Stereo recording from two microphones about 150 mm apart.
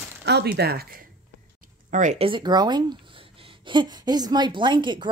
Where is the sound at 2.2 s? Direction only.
30° right (ahead or behind).